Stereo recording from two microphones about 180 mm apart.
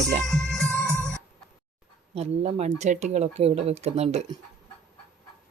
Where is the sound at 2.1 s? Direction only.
35° right (ahead or behind).